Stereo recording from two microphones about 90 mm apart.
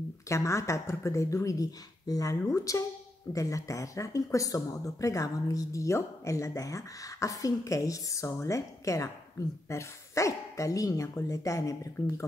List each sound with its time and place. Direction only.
0.3 s speech: 35° left (ahead or behind)